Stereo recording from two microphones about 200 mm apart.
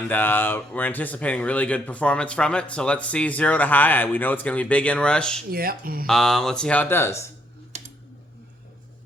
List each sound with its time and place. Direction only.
0.1 s speech: 10° left (ahead or behind)
5.5 s speech: 50° right (ahead or behind)
6.1 s speech: centre (ahead or behind)
7.7 s a sound: 35° right (ahead or behind)